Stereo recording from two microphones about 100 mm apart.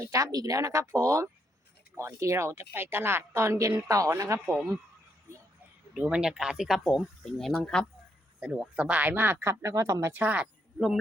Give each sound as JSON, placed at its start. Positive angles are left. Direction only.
{"t": 0.0, "sound": "speech", "side_deg": -35}
{"t": 6.0, "sound": "speech", "side_deg": -10}
{"t": 8.4, "sound": "speech", "side_deg": -5}
{"t": 10.1, "sound": "speech", "side_deg": -15}
{"t": 10.8, "sound": "speech", "side_deg": 0}